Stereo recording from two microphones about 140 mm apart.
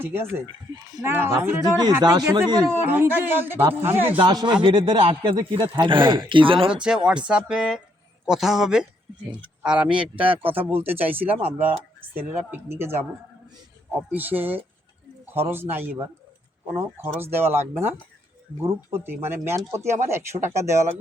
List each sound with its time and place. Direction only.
0.0 s a man's voice: 15° right (ahead or behind)
0.4 s speech: 25° right (ahead or behind)
2.8 s a man's voice: 15° right (ahead or behind)
4.2 s speech: 30° right (ahead or behind)
6.8 s a man's voice: 5° right (ahead or behind)
10.2 s speech: 40° right (ahead or behind)
10.5 s a man's voice: 15° right (ahead or behind)
10.8 s speech: 45° right (ahead or behind)
11.0 s a man's voice: 10° right (ahead or behind)